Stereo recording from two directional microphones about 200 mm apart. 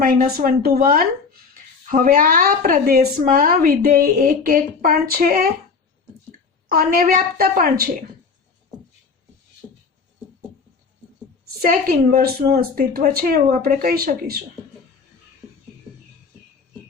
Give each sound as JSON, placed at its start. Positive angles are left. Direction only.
{"t": 0.0, "sound": "speech", "side_deg": -45}
{"t": 6.7, "sound": "speech", "side_deg": -45}
{"t": 11.7, "sound": "speech", "side_deg": -50}